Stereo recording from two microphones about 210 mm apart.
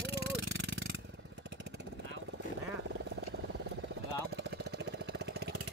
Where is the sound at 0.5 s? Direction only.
60° right (ahead or behind).